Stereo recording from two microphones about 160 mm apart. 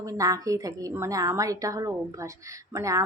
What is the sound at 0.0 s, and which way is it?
Speech, 20° right (ahead or behind).